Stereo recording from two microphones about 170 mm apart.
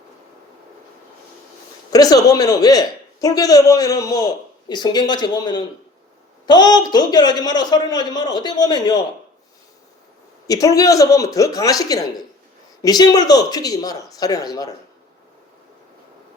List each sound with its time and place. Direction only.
1.9 s a man's voice: 20° left (ahead or behind)
10.4 s a man's voice: 20° left (ahead or behind)